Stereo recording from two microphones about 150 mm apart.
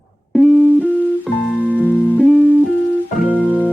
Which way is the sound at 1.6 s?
10° right (ahead or behind).